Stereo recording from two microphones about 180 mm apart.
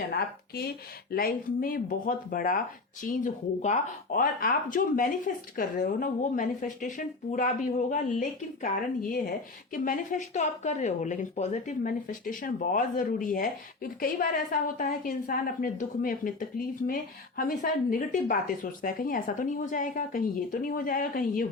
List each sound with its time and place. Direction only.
0.1 s speech: 60° left (ahead or behind)